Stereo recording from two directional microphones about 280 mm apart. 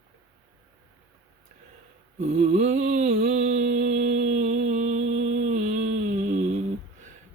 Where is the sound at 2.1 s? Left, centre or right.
Right.